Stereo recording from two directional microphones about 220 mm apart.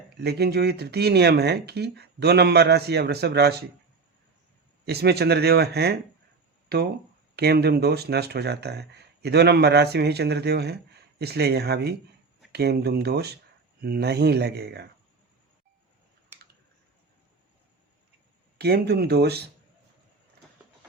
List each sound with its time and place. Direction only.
0.2 s speech: 50° right (ahead or behind)
4.9 s speech: 45° right (ahead or behind)
18.5 s speech: 45° right (ahead or behind)